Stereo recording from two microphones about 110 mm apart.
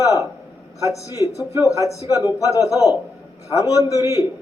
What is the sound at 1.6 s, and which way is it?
A man's voice, 30° left (ahead or behind).